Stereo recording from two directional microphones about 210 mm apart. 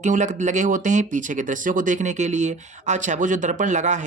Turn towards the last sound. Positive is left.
turn(degrees=-35)  # may be behind; listen again after turning